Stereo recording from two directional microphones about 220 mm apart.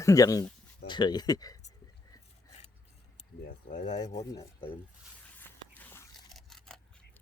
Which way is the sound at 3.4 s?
35° left (ahead or behind).